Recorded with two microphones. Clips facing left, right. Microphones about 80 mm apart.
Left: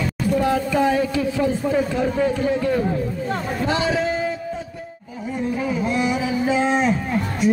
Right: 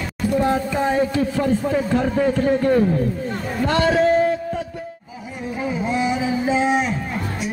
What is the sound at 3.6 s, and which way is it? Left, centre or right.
Speech, right.